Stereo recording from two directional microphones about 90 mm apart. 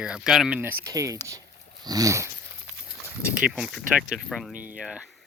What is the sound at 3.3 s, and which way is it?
Speech, 10° right (ahead or behind).